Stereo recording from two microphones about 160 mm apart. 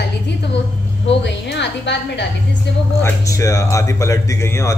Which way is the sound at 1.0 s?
90° left.